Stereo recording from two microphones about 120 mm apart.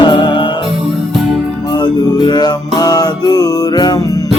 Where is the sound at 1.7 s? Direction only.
35° left (ahead or behind).